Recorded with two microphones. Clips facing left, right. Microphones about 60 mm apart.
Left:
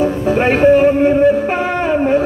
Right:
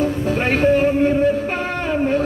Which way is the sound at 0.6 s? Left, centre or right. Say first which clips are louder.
Left 5 dB; centre.